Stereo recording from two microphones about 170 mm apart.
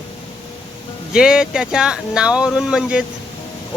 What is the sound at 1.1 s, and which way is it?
Speech, 5° right (ahead or behind).